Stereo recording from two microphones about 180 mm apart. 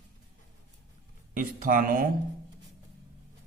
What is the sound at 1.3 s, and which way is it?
Speech, 50° right (ahead or behind).